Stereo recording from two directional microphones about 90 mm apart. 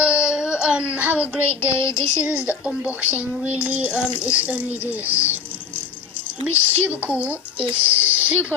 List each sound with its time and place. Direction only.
0.0 s child singing: 10° right (ahead or behind)
1.7 s child singing: 35° left (ahead or behind)
2.2 s a woman's voice: 15° right (ahead or behind)